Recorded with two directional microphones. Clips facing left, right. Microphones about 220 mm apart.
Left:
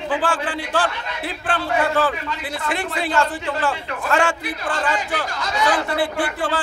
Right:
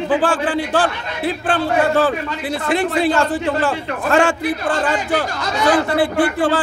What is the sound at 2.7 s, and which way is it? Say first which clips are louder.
A man's voice: right 7 dB; 35° right (ahead or behind).